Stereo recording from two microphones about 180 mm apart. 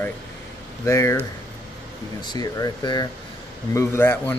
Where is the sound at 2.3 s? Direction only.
20° left (ahead or behind).